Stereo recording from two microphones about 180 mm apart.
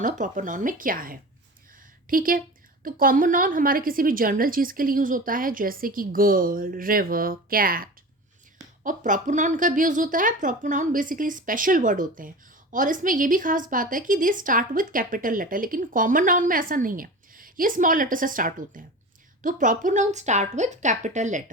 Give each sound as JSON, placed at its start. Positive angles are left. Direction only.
{"t": 0.0, "sound": "a woman's voice", "side_deg": -45}